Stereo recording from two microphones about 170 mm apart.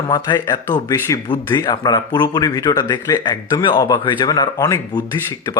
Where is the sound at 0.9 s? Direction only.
20° left (ahead or behind).